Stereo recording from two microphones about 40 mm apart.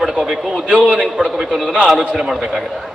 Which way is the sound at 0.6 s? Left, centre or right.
Right.